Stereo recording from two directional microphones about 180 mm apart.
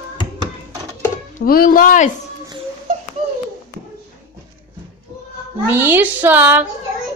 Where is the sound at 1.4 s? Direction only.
55° left (ahead or behind).